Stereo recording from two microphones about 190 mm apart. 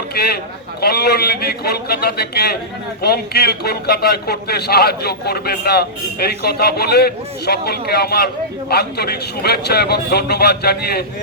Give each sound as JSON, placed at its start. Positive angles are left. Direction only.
{"t": 0.1, "sound": "a man's voice", "side_deg": 55}